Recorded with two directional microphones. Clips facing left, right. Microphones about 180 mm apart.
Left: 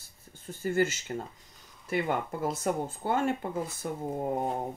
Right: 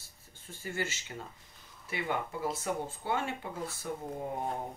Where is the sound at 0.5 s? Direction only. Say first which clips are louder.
Left 10 dB; 45° left (ahead or behind).